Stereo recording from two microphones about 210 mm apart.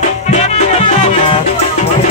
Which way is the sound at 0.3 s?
30° left (ahead or behind).